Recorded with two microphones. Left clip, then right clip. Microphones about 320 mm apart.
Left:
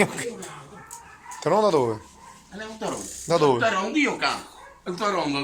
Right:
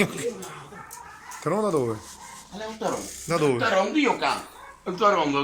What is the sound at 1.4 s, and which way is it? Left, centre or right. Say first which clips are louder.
Speech: left 5 dB; left.